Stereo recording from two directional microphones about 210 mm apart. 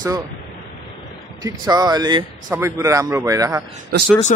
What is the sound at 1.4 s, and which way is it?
Speech, 20° right (ahead or behind).